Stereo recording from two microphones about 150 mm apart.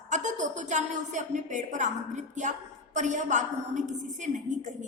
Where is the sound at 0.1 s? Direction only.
55° right (ahead or behind).